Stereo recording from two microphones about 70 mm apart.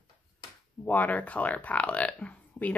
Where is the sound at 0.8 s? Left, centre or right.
Left.